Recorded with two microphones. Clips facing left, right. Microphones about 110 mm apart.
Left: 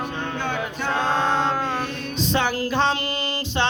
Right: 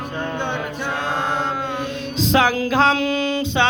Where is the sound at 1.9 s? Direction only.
90° right.